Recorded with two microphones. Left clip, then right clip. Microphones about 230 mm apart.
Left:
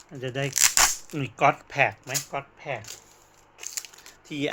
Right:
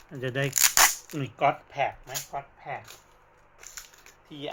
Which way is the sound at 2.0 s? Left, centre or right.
Left.